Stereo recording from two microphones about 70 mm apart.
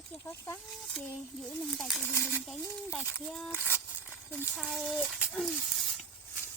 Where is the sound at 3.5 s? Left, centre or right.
Right.